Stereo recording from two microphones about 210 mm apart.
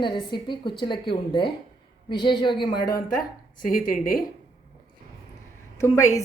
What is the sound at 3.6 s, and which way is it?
Speech, 45° left (ahead or behind).